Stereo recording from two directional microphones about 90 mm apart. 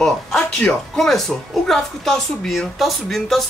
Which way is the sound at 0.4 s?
15° left (ahead or behind).